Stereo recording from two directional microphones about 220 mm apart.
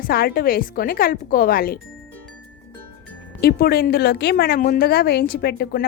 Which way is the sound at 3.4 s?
45° left (ahead or behind).